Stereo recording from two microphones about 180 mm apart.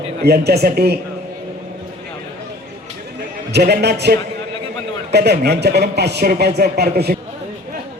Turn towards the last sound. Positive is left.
turn(degrees=-65)  # may be behind; listen again after turning